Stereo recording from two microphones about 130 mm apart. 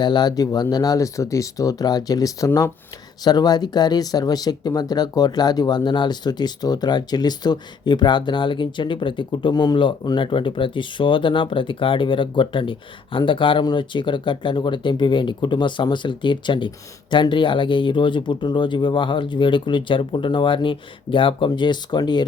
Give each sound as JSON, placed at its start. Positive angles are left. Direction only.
{"t": 0.0, "sound": "speech", "side_deg": 35}